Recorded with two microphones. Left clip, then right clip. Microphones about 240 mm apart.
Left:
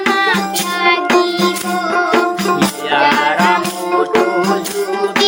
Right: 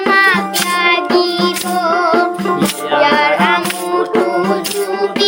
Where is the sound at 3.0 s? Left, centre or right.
Right.